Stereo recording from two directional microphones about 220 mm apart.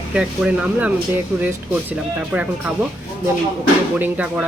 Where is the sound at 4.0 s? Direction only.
5° right (ahead or behind).